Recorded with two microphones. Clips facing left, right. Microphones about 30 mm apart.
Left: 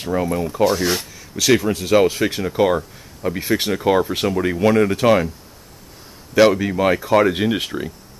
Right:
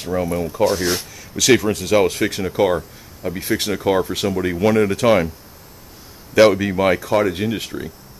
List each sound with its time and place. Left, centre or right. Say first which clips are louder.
0.0 s speech: left 1 dB; centre
6.3 s speech: right 1 dB; centre
7.0 s speech: left 3 dB; centre